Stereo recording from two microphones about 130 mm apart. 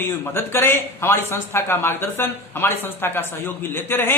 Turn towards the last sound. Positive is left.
turn(degrees=15)  # may be behind; listen again after turning